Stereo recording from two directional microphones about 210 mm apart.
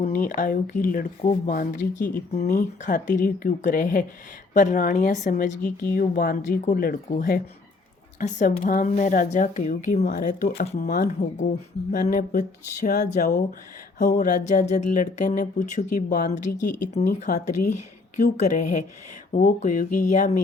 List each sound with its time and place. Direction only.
0.0 s speech: 40° left (ahead or behind)